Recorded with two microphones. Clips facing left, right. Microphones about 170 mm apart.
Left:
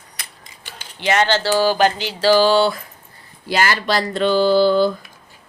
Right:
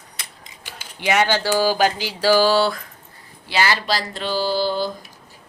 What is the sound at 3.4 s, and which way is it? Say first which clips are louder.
Speech: left 2 dB; 50° left (ahead or behind).